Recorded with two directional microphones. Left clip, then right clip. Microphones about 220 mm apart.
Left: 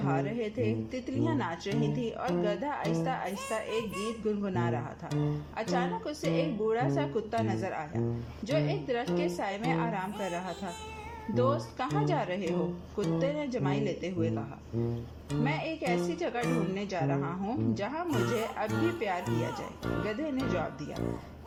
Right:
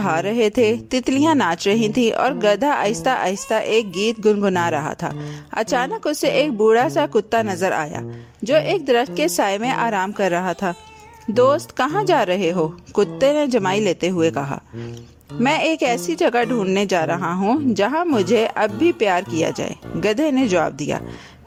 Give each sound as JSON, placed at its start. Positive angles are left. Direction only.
{"t": 0.0, "sound": "a woman's voice", "side_deg": -50}
{"t": 15.4, "sound": "a woman's voice", "side_deg": -50}